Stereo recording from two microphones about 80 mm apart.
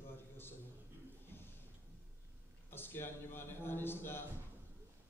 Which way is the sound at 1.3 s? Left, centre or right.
Left.